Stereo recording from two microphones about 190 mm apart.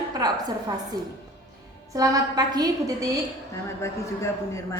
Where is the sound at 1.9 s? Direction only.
20° right (ahead or behind).